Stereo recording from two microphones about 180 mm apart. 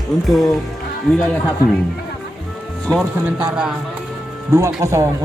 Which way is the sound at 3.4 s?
5° right (ahead or behind).